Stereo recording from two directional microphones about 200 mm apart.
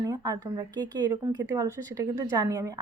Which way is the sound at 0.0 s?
20° right (ahead or behind).